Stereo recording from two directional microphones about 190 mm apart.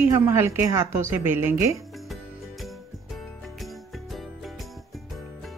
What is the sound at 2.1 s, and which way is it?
Music, centre (ahead or behind).